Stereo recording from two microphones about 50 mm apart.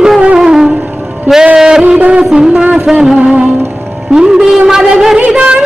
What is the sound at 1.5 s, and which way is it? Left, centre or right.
Music, centre.